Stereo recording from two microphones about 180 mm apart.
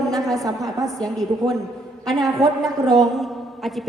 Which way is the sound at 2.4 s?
20° right (ahead or behind).